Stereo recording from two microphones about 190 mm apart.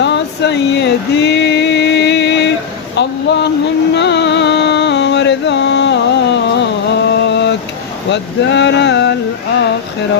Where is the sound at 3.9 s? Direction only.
65° left (ahead or behind).